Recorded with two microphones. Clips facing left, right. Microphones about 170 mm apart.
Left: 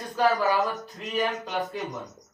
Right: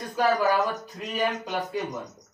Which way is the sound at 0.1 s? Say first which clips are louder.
Even; 10° right (ahead or behind).